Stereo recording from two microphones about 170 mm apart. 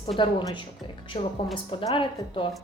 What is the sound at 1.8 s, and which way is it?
Speech, 30° left (ahead or behind).